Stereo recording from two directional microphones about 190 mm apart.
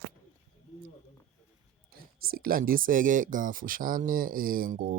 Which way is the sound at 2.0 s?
50° right (ahead or behind).